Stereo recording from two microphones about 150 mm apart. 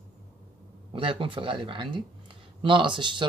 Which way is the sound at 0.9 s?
35° right (ahead or behind).